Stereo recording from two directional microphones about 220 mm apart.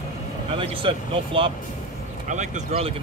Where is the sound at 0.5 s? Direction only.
25° right (ahead or behind).